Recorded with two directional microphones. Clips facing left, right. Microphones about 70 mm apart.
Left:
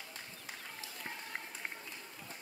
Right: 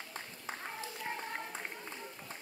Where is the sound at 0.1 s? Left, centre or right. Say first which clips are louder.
Right 5 dB; right.